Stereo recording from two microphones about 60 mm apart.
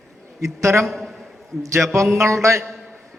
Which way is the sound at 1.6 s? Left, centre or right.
Right.